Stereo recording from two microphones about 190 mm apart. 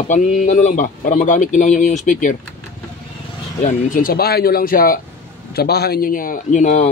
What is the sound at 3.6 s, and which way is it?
A man's voice, 45° left (ahead or behind).